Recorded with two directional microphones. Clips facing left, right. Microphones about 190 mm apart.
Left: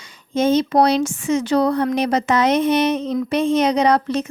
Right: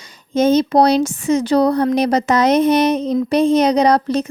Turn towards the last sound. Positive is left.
turn(degrees=-35)  # may be behind; listen again after turning